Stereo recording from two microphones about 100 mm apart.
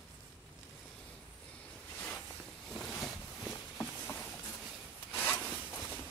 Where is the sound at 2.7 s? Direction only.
5° left (ahead or behind).